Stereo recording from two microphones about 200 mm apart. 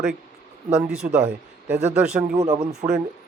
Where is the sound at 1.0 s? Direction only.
10° right (ahead or behind).